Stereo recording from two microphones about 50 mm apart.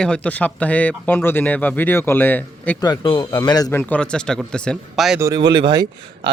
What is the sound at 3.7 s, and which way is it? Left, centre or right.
Speech, left.